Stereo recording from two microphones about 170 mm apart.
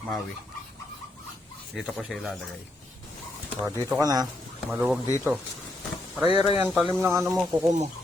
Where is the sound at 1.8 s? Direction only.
Centre (ahead or behind).